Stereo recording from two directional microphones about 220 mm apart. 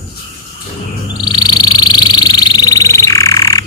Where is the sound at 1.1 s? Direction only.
20° left (ahead or behind).